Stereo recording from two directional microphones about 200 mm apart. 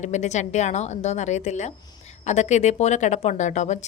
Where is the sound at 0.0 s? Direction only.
35° left (ahead or behind).